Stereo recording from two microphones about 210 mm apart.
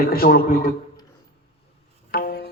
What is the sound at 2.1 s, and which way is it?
Music, 45° left (ahead or behind).